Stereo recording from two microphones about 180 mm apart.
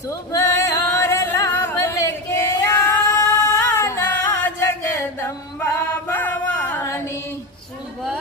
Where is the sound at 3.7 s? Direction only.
15° left (ahead or behind).